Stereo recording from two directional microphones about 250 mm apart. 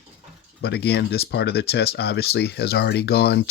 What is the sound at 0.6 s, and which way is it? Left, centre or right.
Speech, left.